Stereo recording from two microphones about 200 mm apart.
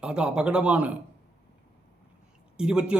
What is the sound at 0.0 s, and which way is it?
Speech, 5° right (ahead or behind).